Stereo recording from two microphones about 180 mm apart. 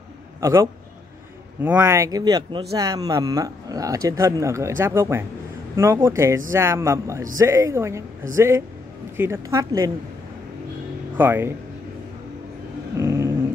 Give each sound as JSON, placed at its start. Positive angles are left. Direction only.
{"t": 0.4, "sound": "a man's voice", "side_deg": -15}
{"t": 11.1, "sound": "speech", "side_deg": -10}
{"t": 13.0, "sound": "dog", "side_deg": -15}